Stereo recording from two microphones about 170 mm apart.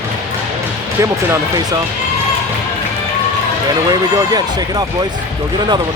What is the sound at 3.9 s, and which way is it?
Speech, 20° right (ahead or behind).